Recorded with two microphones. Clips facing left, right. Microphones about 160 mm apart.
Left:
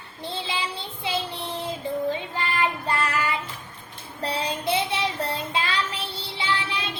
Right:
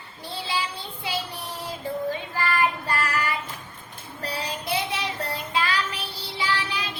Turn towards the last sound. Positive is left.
turn(degrees=25)  # may be behind; listen again after turning